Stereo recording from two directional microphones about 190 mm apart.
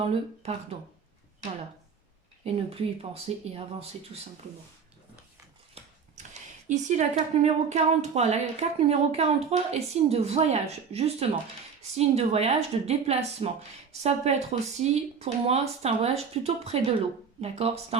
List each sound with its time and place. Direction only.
0.1 s speech: 30° right (ahead or behind)
2.4 s speech: 30° right (ahead or behind)
5.8 s ratchet: 30° right (ahead or behind)
6.7 s speech: 40° right (ahead or behind)